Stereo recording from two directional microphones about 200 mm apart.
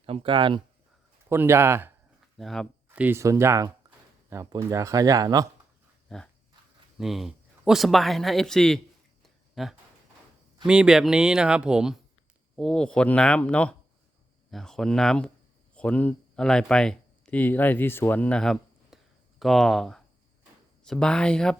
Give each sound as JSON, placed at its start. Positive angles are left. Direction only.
{"t": 0.0, "sound": "speech", "side_deg": -25}
{"t": 1.3, "sound": "speech", "side_deg": -10}
{"t": 2.4, "sound": "speech", "side_deg": 0}
{"t": 7.0, "sound": "a man's voice", "side_deg": 0}
{"t": 9.2, "sound": "a sound", "side_deg": 0}
{"t": 10.7, "sound": "a man's voice", "side_deg": -5}